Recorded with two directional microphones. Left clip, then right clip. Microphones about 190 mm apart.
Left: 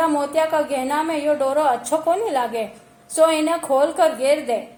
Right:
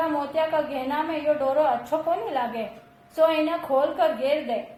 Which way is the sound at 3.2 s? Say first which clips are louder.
Left 4 dB; 45° left (ahead or behind).